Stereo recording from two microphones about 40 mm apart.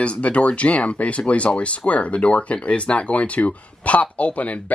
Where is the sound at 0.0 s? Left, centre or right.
Left.